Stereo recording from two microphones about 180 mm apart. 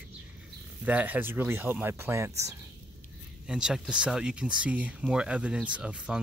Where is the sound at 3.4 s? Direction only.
5° right (ahead or behind).